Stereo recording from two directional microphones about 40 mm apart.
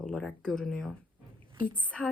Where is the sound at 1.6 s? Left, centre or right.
Left.